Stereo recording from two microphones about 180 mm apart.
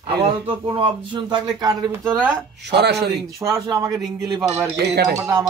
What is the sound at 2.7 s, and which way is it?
Speech, 65° right (ahead or behind).